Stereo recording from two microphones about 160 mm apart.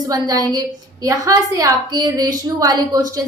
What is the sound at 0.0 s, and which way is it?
A woman's voice, 25° right (ahead or behind).